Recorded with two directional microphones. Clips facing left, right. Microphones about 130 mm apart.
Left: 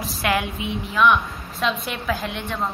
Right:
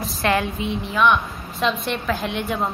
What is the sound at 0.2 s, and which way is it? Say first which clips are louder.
A woman's voice: right 2 dB; 5° left (ahead or behind).